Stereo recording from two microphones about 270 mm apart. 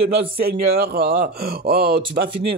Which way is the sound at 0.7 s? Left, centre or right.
Right.